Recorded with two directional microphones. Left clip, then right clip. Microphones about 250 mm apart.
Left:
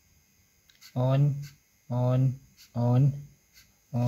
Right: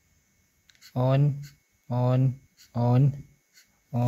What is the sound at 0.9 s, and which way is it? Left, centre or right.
Speech, right.